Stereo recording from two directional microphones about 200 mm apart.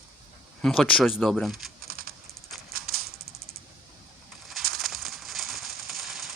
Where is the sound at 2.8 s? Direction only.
50° right (ahead or behind).